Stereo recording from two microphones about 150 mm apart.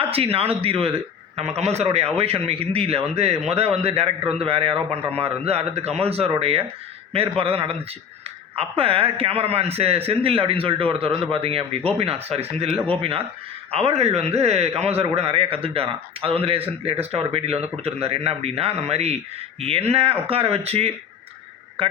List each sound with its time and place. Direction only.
0.1 s a man's voice: 40° right (ahead or behind)